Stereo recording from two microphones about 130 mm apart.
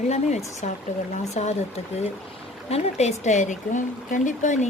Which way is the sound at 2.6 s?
55° left (ahead or behind).